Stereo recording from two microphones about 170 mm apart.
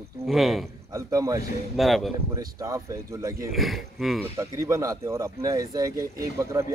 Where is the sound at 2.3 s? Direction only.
20° right (ahead or behind).